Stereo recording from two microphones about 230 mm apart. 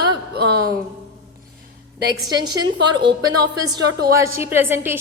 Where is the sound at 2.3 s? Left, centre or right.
Centre.